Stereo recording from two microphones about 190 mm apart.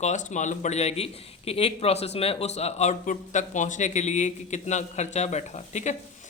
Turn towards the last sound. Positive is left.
turn(degrees=40)  # may be behind; listen again after turning